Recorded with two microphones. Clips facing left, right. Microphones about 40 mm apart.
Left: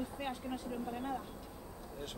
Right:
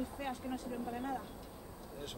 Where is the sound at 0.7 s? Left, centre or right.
Centre.